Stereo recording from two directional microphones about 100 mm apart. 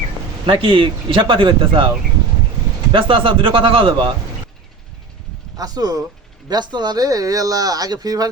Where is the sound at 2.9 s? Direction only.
60° right (ahead or behind).